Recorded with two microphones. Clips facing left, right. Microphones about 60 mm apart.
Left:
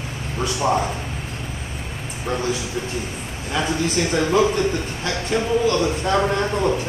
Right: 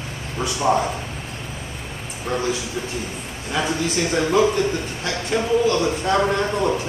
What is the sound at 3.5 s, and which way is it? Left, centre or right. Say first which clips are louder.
A man's voice: left 1 dB; centre.